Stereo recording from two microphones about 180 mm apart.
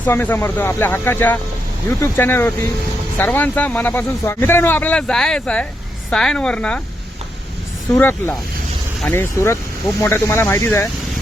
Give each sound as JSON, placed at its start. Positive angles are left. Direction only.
{"t": 0.0, "sound": "a woman's voice", "side_deg": 10}
{"t": 7.9, "sound": "speech", "side_deg": 10}